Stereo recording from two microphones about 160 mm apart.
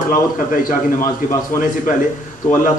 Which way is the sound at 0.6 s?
60° left (ahead or behind).